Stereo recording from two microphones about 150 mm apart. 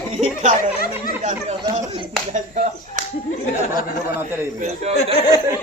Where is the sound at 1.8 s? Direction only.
30° right (ahead or behind).